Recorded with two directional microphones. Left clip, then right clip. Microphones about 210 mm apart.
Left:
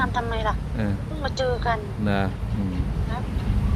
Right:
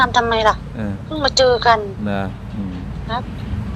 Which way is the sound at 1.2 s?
50° right (ahead or behind).